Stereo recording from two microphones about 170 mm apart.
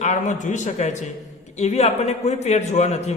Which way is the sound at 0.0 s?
45° left (ahead or behind).